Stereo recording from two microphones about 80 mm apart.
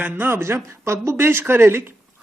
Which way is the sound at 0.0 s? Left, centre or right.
Right.